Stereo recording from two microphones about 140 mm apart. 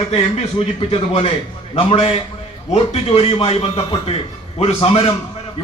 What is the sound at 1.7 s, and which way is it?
A man's voice, 45° left (ahead or behind).